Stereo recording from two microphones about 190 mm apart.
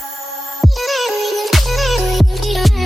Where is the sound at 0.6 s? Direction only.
Centre (ahead or behind).